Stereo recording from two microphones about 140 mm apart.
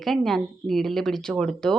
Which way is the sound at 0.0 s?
Centre (ahead or behind).